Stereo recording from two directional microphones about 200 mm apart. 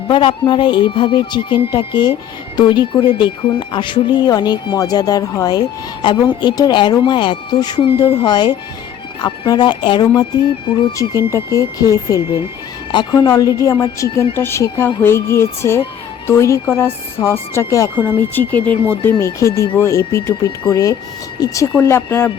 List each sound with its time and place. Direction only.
0.1 s speech: 25° left (ahead or behind)
17.9 s speech: 10° right (ahead or behind)
18.3 s speech: 10° left (ahead or behind)